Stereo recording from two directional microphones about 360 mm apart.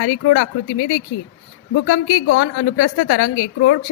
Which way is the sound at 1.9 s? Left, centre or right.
Left.